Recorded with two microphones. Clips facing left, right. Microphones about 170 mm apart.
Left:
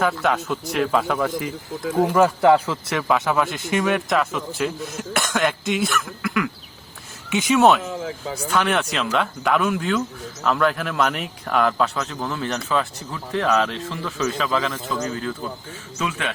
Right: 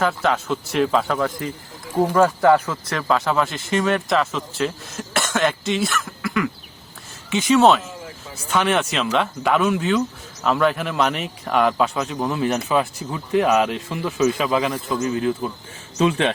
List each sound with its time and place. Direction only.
0.0 s speech: centre (ahead or behind)
2.4 s speech: 20° left (ahead or behind)
2.9 s speech: 5° left (ahead or behind)
7.9 s a sound: 90° left
8.5 s speech: 5° right (ahead or behind)
12.1 s speech: 20° right (ahead or behind)
16.0 s a man's voice: 30° right (ahead or behind)